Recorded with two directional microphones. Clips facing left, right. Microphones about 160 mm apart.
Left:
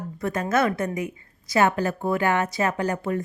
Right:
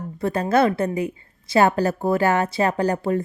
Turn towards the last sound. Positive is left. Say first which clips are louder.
# right 4 dB
turn(degrees=-35)  # may be behind; listen again after turning